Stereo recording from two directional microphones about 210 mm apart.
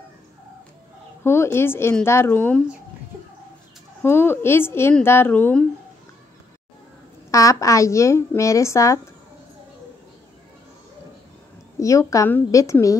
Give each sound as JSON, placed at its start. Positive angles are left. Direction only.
{"t": 1.2, "sound": "a woman's voice", "side_deg": 10}
{"t": 4.0, "sound": "a woman's voice", "side_deg": 10}
{"t": 7.2, "sound": "a woman's voice", "side_deg": 15}
{"t": 11.8, "sound": "a woman's voice", "side_deg": 15}